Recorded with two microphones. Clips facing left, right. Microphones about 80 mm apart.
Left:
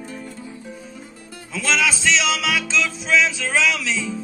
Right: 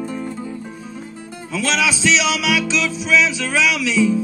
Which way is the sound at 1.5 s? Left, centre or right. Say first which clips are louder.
Right 2 dB; left.